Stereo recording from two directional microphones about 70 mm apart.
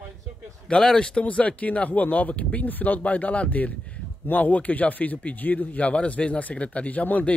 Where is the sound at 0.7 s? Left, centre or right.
Centre.